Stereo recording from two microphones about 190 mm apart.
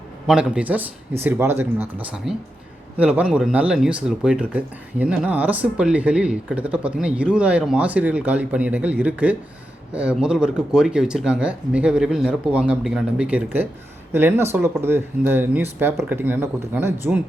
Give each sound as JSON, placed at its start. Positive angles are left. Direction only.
{"t": 0.3, "sound": "speech", "side_deg": -5}